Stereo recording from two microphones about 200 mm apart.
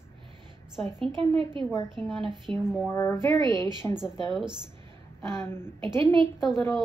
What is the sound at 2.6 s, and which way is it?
Speech, centre (ahead or behind).